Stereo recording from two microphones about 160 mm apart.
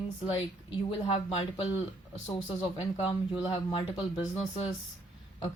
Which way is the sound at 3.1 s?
30° left (ahead or behind).